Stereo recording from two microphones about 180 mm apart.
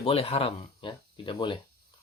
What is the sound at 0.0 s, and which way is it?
Speech, 30° left (ahead or behind).